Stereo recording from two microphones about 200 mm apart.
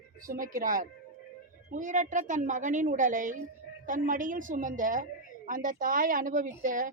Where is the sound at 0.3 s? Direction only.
45° right (ahead or behind).